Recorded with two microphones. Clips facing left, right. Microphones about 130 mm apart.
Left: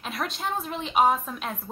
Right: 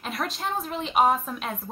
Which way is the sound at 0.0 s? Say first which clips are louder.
Right 1 dB; centre (ahead or behind).